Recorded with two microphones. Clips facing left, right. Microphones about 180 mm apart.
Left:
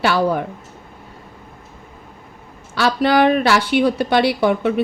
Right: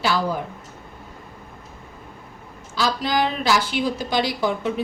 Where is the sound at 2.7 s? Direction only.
65° left (ahead or behind).